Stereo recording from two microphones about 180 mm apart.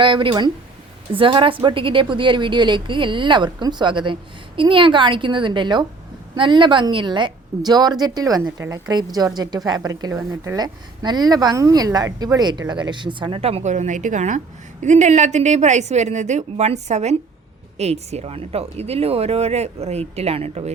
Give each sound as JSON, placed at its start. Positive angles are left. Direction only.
{"t": 0.0, "sound": "a woman's voice", "side_deg": -25}